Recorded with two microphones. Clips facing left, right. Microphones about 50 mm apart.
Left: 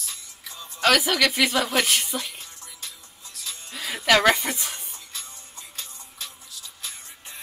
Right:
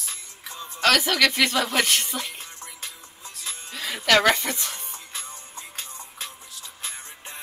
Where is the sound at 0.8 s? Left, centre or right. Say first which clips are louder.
Even; centre.